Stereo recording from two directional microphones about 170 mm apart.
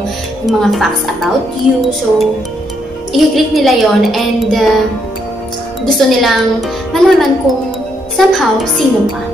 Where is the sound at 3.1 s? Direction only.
Centre (ahead or behind).